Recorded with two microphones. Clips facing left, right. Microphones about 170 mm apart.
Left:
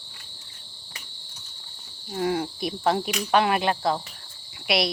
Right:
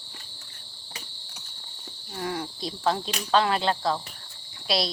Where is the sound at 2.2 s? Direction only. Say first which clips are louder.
Left 6 dB; 20° left (ahead or behind).